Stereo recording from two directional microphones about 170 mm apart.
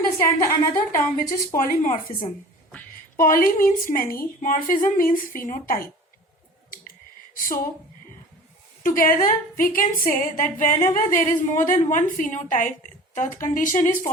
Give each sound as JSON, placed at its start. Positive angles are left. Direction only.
{"t": 0.2, "sound": "a woman's voice", "side_deg": 15}
{"t": 1.5, "sound": "a woman's voice", "side_deg": 50}
{"t": 7.4, "sound": "a woman's voice", "side_deg": 55}
{"t": 8.8, "sound": "a woman's voice", "side_deg": 55}